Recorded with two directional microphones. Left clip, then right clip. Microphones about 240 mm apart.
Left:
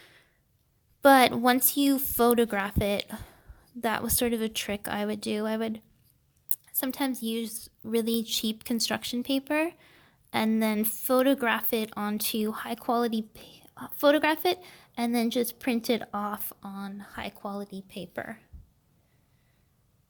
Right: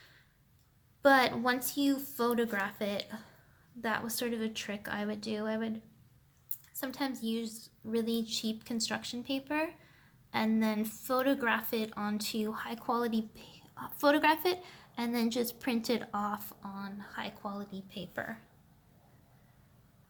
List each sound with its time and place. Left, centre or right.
1.0 s a woman's voice: left